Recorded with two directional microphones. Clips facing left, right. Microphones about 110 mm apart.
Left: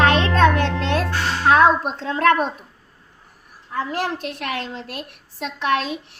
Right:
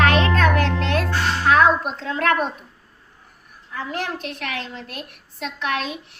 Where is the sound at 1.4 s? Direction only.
30° left (ahead or behind).